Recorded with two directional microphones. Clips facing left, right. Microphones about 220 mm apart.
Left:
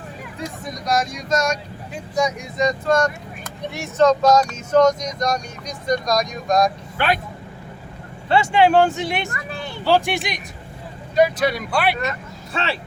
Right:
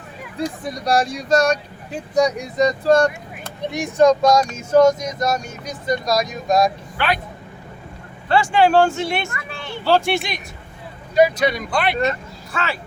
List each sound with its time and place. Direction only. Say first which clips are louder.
0.3 s speech: right 7 dB; 35° right (ahead or behind)
3.7 s speech: right 2 dB; 15° right (ahead or behind)
8.3 s speech: even; 20° left (ahead or behind)
9.3 s speech: left 2 dB; 35° left (ahead or behind)
9.8 s speech: right 1 dB; 15° left (ahead or behind)
11.1 s speech: right 2 dB; centre (ahead or behind)